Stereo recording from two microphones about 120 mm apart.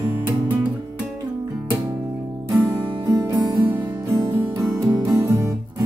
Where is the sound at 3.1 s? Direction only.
30° right (ahead or behind).